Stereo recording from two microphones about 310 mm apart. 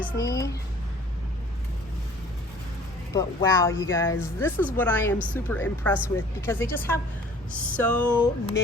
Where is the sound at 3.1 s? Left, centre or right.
Centre.